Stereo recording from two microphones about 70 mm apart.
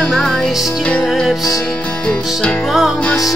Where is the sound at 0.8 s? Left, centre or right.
Centre.